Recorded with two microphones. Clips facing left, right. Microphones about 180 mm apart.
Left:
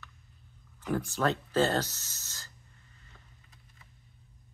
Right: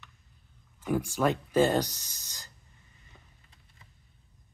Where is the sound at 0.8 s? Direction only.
10° right (ahead or behind).